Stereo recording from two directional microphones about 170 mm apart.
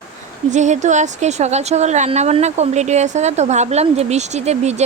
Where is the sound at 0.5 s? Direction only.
45° right (ahead or behind).